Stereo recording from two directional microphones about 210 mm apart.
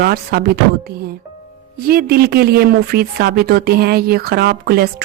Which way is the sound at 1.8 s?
45° right (ahead or behind).